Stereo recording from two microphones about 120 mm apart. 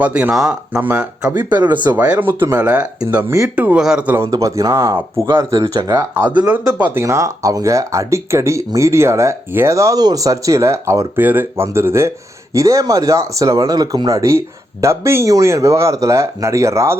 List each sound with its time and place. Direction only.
0.0 s speech: 10° right (ahead or behind)
1.2 s speech: 30° right (ahead or behind)
2.0 s speech: 15° right (ahead or behind)
4.3 s speech: 30° right (ahead or behind)
6.2 s speech: 35° right (ahead or behind)
6.7 s speech: 15° right (ahead or behind)
7.0 s speech: 25° right (ahead or behind)